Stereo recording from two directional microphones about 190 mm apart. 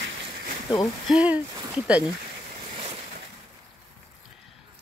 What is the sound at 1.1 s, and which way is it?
Speech, 5° right (ahead or behind).